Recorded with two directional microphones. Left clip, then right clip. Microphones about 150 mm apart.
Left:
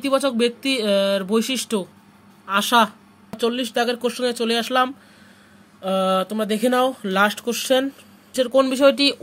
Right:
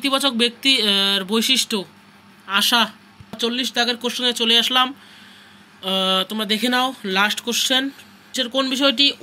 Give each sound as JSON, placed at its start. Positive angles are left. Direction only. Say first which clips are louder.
{"t": 0.0, "sound": "speech", "louder": "right 1 dB", "side_deg": 45}
{"t": 3.3, "sound": "speech", "louder": "even", "side_deg": 65}